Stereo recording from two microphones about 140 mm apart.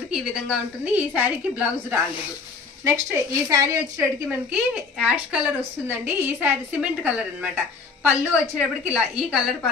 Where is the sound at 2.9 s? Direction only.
25° right (ahead or behind).